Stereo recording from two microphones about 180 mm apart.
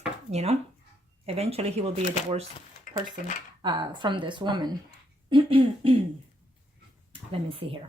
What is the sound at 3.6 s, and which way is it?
Speech, 25° right (ahead or behind).